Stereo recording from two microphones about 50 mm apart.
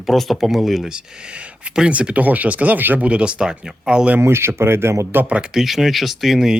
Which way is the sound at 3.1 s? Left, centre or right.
Right.